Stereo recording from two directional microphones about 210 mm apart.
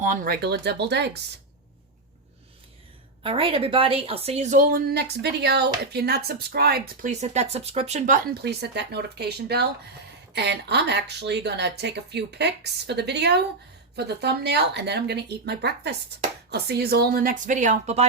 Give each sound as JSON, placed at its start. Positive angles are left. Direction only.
{"t": 0.0, "sound": "speech", "side_deg": -40}
{"t": 3.2, "sound": "a woman's voice", "side_deg": -25}